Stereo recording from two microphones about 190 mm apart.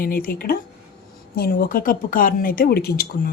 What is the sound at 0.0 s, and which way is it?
Speech, 50° left (ahead or behind).